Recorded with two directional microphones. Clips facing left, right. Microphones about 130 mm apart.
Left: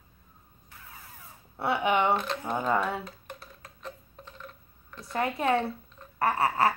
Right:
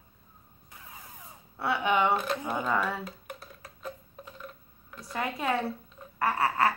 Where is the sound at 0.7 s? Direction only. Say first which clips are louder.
Right 1 dB; 20° right (ahead or behind).